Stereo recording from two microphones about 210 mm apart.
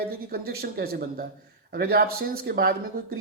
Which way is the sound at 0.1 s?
45° right (ahead or behind).